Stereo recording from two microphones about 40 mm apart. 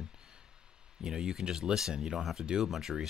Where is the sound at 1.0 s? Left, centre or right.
Centre.